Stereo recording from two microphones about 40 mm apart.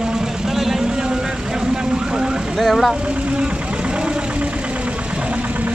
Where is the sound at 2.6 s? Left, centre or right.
Centre.